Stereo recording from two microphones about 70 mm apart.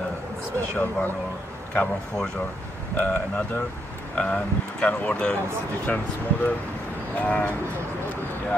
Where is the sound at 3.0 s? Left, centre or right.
Left.